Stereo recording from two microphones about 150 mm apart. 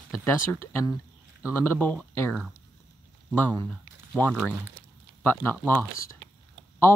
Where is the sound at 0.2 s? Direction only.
15° left (ahead or behind).